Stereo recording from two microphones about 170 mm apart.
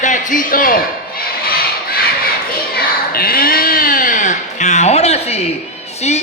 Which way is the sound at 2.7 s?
60° left (ahead or behind).